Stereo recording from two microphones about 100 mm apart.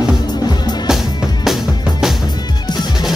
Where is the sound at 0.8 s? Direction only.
Centre (ahead or behind).